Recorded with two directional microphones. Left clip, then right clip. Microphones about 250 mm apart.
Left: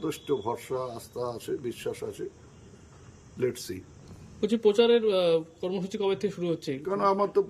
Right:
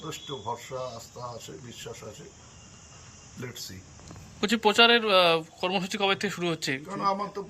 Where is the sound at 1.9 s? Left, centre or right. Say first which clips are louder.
Left 8 dB; left.